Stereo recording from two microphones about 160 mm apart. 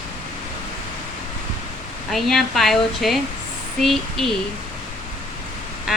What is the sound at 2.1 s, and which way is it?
A woman's voice, centre (ahead or behind).